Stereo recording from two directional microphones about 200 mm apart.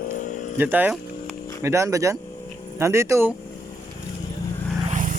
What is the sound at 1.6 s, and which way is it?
Speech, 15° right (ahead or behind).